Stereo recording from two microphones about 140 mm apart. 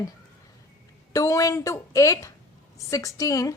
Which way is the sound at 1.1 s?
25° left (ahead or behind).